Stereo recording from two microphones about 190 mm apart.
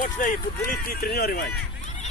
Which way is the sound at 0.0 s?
45° left (ahead or behind).